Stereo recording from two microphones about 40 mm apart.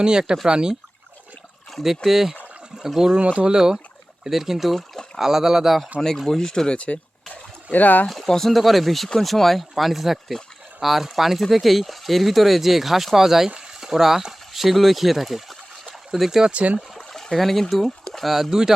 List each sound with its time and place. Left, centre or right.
0.0 s speech: centre
2.0 s speech: centre
3.2 s speech: right
3.5 s speech: centre
6.0 s speech: centre
6.5 s speech: centre
6.7 s speech: left
7.7 s speech: left
8.0 s speech: centre
17.1 s speech: centre
18.0 s a sound: centre
18.5 s speech: centre